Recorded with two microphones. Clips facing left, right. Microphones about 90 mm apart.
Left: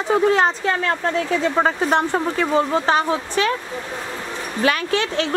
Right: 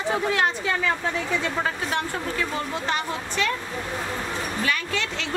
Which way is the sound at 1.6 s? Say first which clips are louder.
Left 8 dB; 70° left (ahead or behind).